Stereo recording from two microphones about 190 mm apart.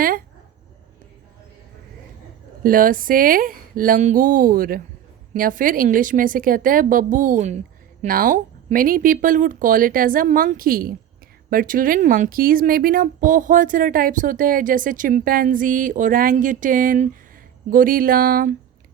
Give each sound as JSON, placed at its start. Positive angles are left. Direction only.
{"t": 2.6, "sound": "speech", "side_deg": -45}